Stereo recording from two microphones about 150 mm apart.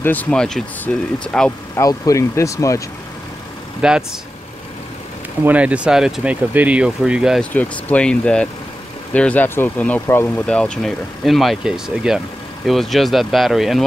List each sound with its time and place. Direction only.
0.0 s speech: 10° left (ahead or behind)
1.8 s speech: 20° left (ahead or behind)
3.8 s speech: 5° right (ahead or behind)
5.4 s speech: 10° right (ahead or behind)
7.5 s speech: 10° left (ahead or behind)